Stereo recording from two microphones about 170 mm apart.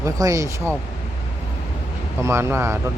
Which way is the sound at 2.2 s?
15° right (ahead or behind).